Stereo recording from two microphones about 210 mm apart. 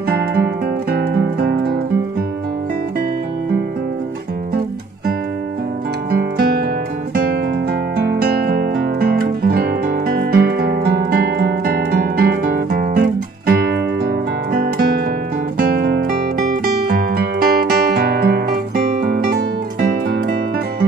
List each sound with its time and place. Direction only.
0.9 s music: 50° right (ahead or behind)
6.1 s music: 45° right (ahead or behind)
7.9 s music: 50° right (ahead or behind)